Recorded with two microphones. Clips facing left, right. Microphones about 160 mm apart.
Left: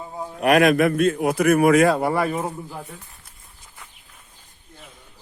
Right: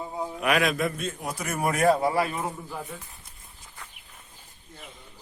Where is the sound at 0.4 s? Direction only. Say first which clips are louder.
Left 9 dB; 50° left (ahead or behind).